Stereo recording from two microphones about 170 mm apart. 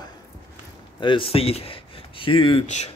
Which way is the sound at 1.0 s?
30° left (ahead or behind).